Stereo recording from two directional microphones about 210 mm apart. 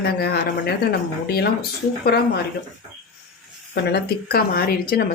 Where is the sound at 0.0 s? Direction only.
50° left (ahead or behind).